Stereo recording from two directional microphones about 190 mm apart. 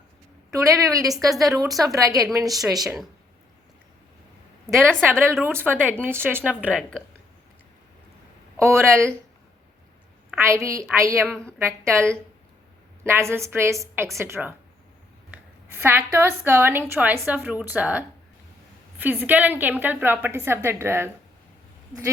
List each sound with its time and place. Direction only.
0.5 s a woman's voice: 15° right (ahead or behind)
2.5 s a woman's voice: centre (ahead or behind)
4.6 s a woman's voice: 5° left (ahead or behind)
5.2 s a woman's voice: 10° right (ahead or behind)
6.7 s a woman's voice: 5° left (ahead or behind)
8.5 s a woman's voice: 15° right (ahead or behind)
10.3 s a woman's voice: 15° right (ahead or behind)
13.1 s a woman's voice: 15° right (ahead or behind)